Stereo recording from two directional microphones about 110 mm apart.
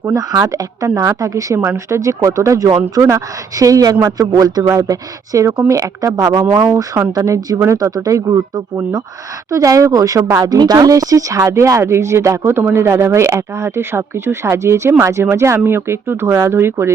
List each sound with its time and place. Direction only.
0.0 s speech: 30° right (ahead or behind)